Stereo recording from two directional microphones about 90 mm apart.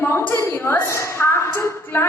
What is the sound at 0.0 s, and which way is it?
A woman's voice, 25° left (ahead or behind).